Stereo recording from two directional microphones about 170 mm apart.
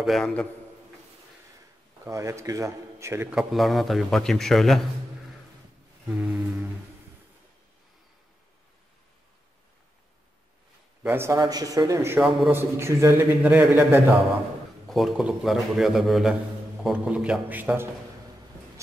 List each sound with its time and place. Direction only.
0.0 s a man's voice: centre (ahead or behind)
2.0 s a man's voice: 15° right (ahead or behind)
3.3 s a man's voice: centre (ahead or behind)
6.0 s a sound: 5° right (ahead or behind)
11.1 s a man's voice: 15° right (ahead or behind)
14.9 s a man's voice: centre (ahead or behind)